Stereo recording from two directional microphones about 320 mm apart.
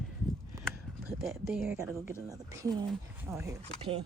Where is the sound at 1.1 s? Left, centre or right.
Centre.